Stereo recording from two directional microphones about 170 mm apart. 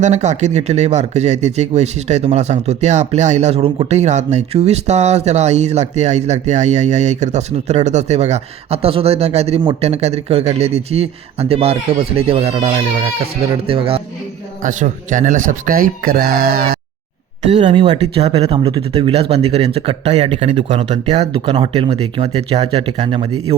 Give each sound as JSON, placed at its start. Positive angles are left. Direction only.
{"t": 0.0, "sound": "speech", "side_deg": -45}
{"t": 14.6, "sound": "speech", "side_deg": -50}
{"t": 17.6, "sound": "speech", "side_deg": -30}